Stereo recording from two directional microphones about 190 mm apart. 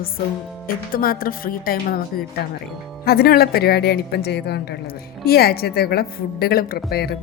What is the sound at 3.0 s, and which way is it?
A woman's voice, 55° left (ahead or behind).